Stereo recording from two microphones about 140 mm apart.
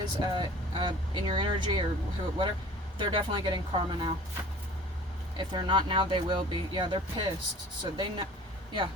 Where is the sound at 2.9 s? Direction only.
35° right (ahead or behind).